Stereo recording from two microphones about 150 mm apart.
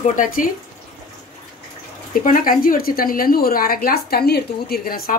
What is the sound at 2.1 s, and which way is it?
A woman's voice, 65° left (ahead or behind).